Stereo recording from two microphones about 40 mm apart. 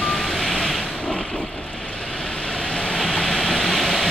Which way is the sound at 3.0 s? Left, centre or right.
Centre.